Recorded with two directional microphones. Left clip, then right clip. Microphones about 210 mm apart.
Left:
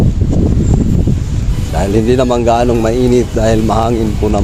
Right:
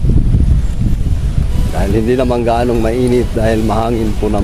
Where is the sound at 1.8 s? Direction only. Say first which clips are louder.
Left 2 dB; 15° left (ahead or behind).